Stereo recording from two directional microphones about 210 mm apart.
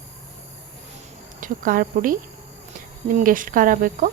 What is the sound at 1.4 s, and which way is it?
Speech, 40° right (ahead or behind).